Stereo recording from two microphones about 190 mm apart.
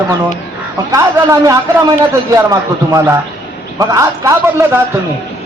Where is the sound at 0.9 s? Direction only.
15° right (ahead or behind).